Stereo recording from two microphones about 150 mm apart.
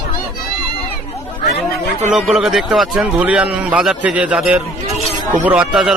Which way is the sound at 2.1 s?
5° right (ahead or behind).